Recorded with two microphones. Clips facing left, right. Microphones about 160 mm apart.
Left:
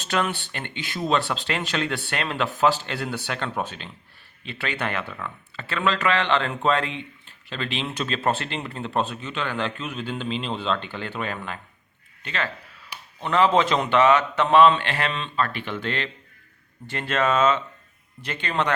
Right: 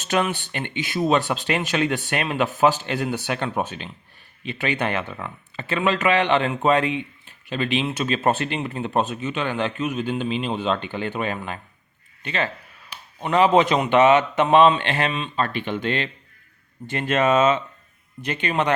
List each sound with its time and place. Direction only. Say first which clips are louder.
0.1 s a man's voice: right 3 dB; 15° right (ahead or behind)